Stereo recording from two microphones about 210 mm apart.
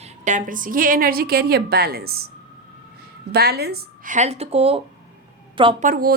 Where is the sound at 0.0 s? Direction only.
35° right (ahead or behind).